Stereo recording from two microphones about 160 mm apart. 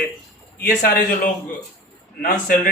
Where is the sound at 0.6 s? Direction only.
75° left (ahead or behind).